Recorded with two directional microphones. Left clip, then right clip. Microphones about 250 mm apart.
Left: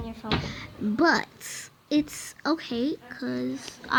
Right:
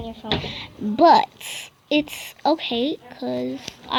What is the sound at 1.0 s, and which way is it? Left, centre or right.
Babbling, centre.